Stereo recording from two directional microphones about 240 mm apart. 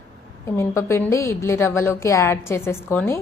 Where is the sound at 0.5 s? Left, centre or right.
Centre.